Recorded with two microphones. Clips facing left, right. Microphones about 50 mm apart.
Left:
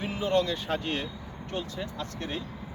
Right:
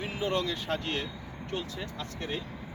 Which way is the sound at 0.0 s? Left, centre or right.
Centre.